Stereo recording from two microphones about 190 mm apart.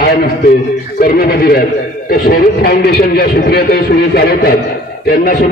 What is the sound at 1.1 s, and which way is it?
Speech, 55° left (ahead or behind).